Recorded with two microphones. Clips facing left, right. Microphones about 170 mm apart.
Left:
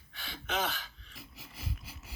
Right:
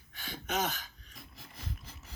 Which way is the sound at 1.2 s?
5° left (ahead or behind).